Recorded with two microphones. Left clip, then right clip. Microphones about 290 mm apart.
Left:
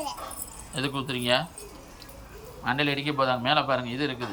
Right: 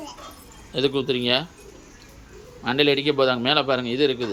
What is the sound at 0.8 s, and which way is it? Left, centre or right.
Speech, centre.